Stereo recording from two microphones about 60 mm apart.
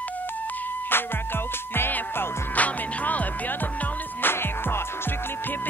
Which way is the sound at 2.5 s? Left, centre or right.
Left.